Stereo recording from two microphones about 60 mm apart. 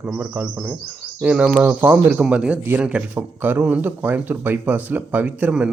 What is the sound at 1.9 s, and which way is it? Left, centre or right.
Speech, centre.